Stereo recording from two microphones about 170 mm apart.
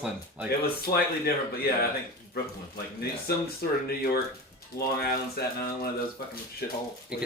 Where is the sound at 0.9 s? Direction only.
25° left (ahead or behind).